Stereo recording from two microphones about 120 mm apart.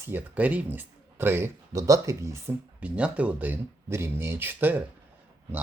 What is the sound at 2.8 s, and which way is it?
Speech, 10° right (ahead or behind).